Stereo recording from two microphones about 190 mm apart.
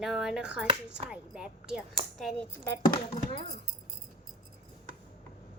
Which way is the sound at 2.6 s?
20° left (ahead or behind).